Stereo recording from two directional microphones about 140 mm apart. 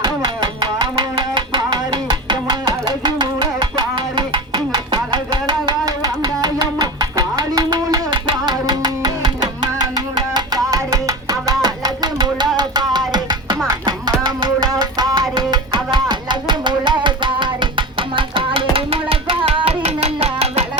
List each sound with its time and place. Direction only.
0.0 s music: 30° right (ahead or behind); by 20.7 s 45° right (ahead or behind)